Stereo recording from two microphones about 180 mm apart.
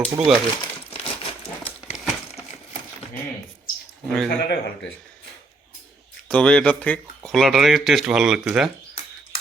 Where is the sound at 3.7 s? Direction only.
55° left (ahead or behind).